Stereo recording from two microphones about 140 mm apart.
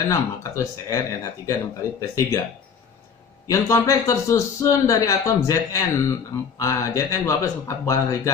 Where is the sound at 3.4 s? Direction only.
25° left (ahead or behind).